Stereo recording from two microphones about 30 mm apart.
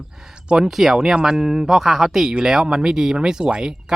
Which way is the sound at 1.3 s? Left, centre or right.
Centre.